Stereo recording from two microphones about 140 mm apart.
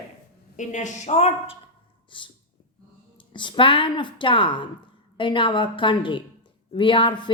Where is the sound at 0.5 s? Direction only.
60° left (ahead or behind).